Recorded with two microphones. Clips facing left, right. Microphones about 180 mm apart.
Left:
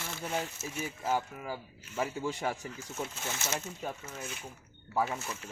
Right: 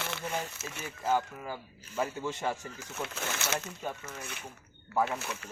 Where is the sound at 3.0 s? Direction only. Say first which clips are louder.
Right 3 dB; 70° right (ahead or behind).